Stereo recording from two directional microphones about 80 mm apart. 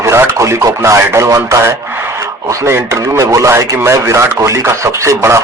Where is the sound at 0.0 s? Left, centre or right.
Right.